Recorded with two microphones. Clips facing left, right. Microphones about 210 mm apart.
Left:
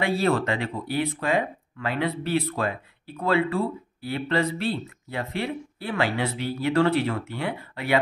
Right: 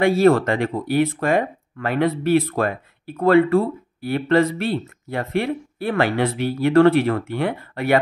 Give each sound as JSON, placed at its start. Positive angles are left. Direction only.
{"t": 0.0, "sound": "speech", "side_deg": -50}